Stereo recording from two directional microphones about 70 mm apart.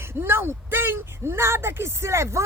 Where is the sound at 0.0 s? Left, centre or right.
Right.